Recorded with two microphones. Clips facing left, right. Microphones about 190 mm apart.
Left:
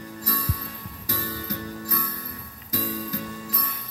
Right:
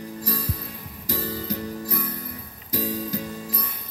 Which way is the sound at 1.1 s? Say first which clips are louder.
Right 3 dB; 25° right (ahead or behind).